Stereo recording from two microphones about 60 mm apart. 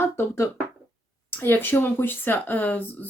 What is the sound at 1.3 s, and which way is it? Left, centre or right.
Speech, left.